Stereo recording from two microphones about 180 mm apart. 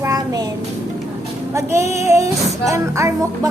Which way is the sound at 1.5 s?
15° right (ahead or behind).